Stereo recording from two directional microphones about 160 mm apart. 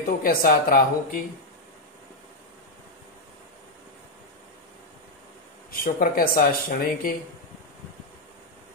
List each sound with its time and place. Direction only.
0.2 s speech: 65° left (ahead or behind)
5.7 s speech: 65° left (ahead or behind)